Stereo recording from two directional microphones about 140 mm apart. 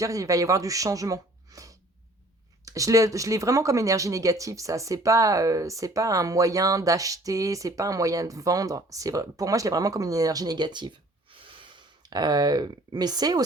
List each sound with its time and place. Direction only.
0.0 s speech: 25° right (ahead or behind)